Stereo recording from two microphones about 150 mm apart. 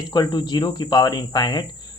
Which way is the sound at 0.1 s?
30° left (ahead or behind).